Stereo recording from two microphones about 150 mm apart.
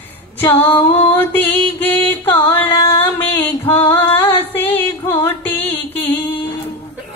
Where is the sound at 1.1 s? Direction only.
15° left (ahead or behind).